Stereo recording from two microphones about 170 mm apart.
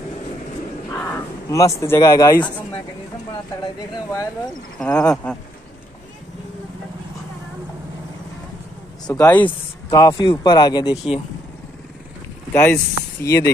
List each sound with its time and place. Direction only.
0.9 s speech: 10° left (ahead or behind)
3.9 s speech: 20° left (ahead or behind)
4.7 s speech: 5° left (ahead or behind)
9.0 s speech: 20° left (ahead or behind)
12.5 s speech: 15° left (ahead or behind)